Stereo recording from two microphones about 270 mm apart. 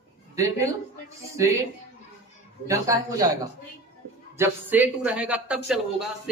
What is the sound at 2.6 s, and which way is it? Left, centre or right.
Speech, centre.